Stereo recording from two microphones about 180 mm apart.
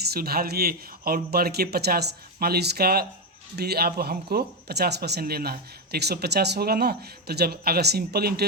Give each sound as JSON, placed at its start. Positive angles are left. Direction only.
{"t": 0.0, "sound": "speech", "side_deg": -60}